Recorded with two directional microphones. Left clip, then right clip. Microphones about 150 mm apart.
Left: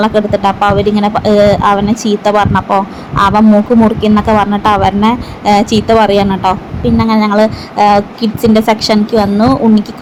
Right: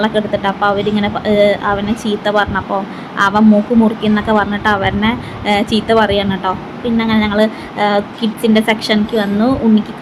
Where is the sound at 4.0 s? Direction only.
25° left (ahead or behind).